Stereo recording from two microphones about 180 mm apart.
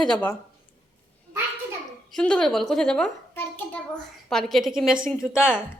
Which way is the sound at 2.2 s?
5° left (ahead or behind).